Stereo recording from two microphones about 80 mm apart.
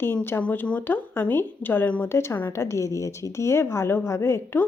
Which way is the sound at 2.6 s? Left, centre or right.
Left.